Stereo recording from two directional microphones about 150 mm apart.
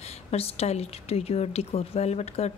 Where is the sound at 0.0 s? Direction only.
45° left (ahead or behind).